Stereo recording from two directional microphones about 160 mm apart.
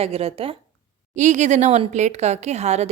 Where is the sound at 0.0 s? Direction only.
40° right (ahead or behind).